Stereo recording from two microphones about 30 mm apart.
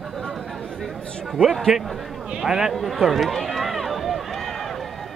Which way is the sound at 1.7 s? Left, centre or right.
Centre.